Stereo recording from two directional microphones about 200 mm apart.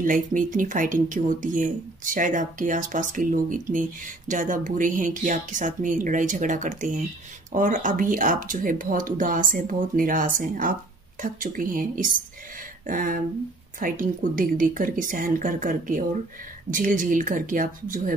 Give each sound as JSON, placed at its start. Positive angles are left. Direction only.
{"t": 0.0, "sound": "speech", "side_deg": -40}